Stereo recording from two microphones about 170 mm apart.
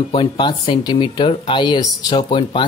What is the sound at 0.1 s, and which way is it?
Speech, 30° left (ahead or behind).